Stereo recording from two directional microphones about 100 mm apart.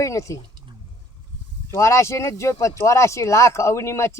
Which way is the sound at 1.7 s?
30° left (ahead or behind).